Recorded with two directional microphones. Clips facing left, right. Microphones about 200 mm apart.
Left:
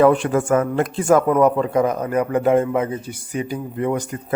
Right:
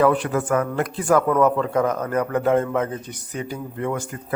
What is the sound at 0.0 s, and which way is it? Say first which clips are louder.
Speech: left 4 dB; 25° left (ahead or behind).